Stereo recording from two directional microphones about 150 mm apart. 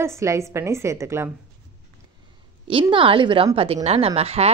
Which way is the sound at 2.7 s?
35° right (ahead or behind).